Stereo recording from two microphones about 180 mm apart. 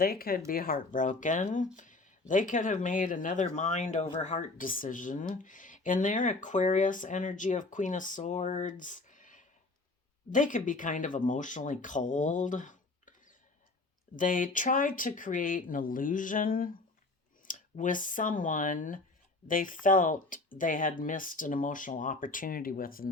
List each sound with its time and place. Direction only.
0.0 s speech: 55° left (ahead or behind)